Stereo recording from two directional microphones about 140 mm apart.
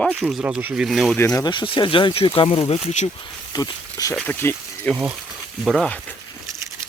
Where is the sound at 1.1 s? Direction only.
20° left (ahead or behind); by 3.1 s 50° left (ahead or behind).